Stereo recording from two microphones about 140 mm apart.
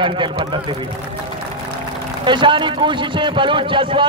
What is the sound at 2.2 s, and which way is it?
A man's voice, 35° right (ahead or behind).